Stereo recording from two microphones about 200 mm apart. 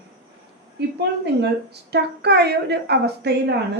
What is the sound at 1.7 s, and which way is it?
A woman's voice, 55° right (ahead or behind).